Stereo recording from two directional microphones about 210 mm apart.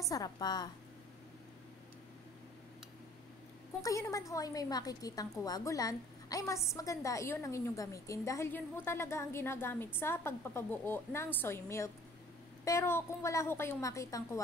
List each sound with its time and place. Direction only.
0.1 s a woman's voice: 20° left (ahead or behind)
3.8 s a woman's voice: 15° left (ahead or behind)